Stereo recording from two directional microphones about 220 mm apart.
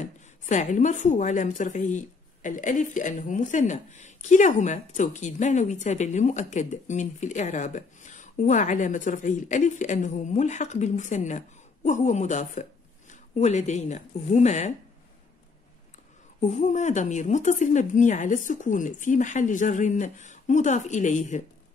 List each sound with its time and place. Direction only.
0.0 s a woman's voice: 35° left (ahead or behind)
16.3 s a woman's voice: 30° left (ahead or behind)